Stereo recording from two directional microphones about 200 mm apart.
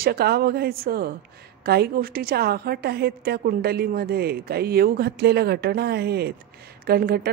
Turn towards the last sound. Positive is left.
turn(degrees=-50)  # may be behind; listen again after turning